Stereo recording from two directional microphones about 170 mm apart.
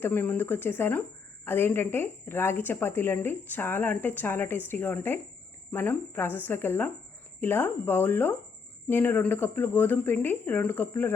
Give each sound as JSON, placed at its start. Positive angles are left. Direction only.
{"t": 0.0, "sound": "a woman's voice", "side_deg": 10}